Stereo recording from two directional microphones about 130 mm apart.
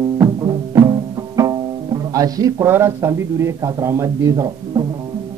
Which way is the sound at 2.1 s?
25° right (ahead or behind).